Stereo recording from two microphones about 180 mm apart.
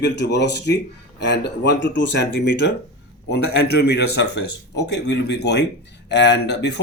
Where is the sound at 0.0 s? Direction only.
70° left (ahead or behind).